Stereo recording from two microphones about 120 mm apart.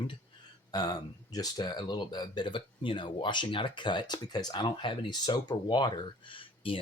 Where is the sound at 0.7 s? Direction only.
35° left (ahead or behind).